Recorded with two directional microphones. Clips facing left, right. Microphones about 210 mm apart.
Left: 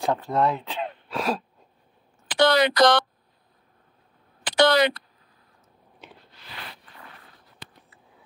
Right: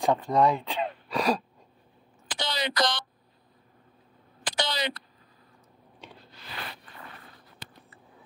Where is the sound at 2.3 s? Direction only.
65° left (ahead or behind).